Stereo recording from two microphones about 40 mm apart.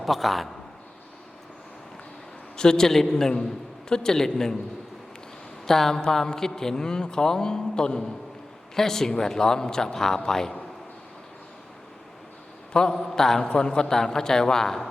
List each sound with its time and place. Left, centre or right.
0.0 s a man's voice: centre
2.6 s a man's voice: centre
5.6 s a man's voice: centre
12.7 s a man's voice: centre
13.0 s a man's voice: centre
13.4 s a man's voice: left